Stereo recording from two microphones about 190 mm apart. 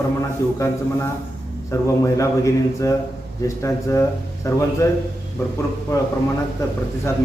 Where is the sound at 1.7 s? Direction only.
15° left (ahead or behind).